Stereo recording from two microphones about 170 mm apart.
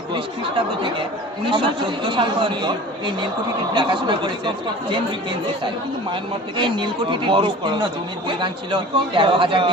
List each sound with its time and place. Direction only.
1.5 s speech: 25° right (ahead or behind)
3.8 s speech: 25° right (ahead or behind)
6.6 s speech: 30° right (ahead or behind)